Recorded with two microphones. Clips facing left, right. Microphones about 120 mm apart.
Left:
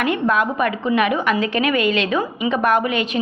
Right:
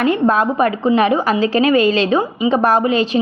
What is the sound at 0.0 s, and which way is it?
A woman's voice, 30° right (ahead or behind).